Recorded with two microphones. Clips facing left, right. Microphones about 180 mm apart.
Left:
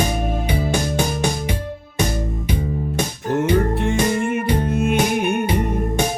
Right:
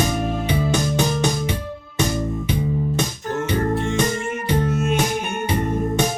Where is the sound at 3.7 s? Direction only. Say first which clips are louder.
Left 2 dB; 60° left (ahead or behind).